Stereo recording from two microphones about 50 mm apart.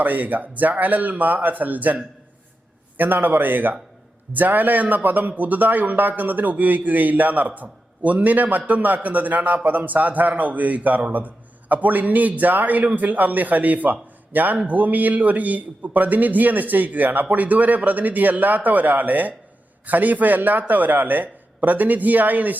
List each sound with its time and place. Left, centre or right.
0.0 s a man's voice: right
3.0 s a man's voice: right